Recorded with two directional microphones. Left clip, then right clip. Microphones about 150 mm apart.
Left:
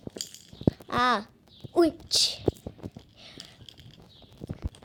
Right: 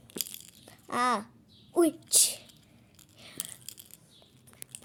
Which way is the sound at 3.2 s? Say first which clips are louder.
Right 2 dB; 30° right (ahead or behind).